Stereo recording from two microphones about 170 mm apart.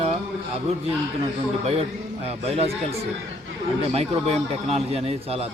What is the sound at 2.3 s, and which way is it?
Speech, 35° right (ahead or behind).